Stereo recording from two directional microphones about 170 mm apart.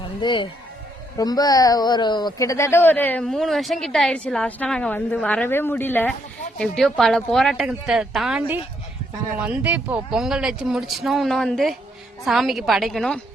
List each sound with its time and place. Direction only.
0.2 s speech: 25° left (ahead or behind); by 13.1 s centre (ahead or behind)